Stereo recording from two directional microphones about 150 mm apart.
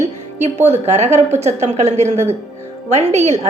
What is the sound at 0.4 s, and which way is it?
A woman's voice, 45° right (ahead or behind).